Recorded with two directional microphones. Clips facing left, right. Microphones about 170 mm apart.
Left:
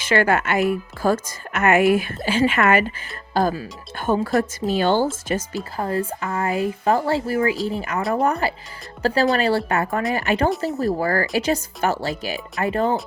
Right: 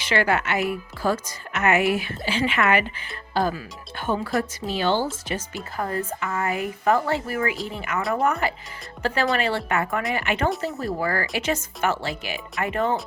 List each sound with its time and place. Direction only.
0.0 s a woman's voice: 45° left (ahead or behind)
5.7 s speech: 30° left (ahead or behind)